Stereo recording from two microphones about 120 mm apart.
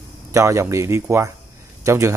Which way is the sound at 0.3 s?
25° right (ahead or behind).